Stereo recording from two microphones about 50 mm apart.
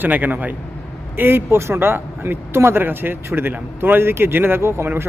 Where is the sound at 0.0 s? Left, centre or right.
Right.